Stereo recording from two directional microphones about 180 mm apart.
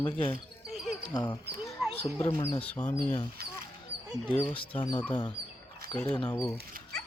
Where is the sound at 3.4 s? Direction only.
55° right (ahead or behind).